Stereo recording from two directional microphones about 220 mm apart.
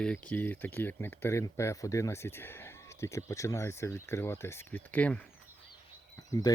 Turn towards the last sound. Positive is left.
turn(degrees=15)  # may be behind; listen again after turning